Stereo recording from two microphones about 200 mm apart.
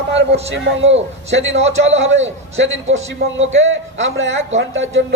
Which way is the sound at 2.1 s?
70° right (ahead or behind).